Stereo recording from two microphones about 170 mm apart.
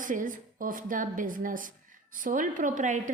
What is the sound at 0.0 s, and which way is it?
A woman's voice, 50° right (ahead or behind).